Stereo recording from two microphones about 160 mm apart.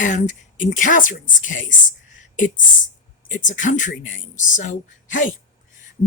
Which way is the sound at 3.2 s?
55° left (ahead or behind).